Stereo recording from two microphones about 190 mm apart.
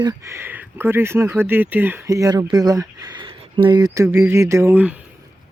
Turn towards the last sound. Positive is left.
turn(degrees=-5)  # may be behind; listen again after turning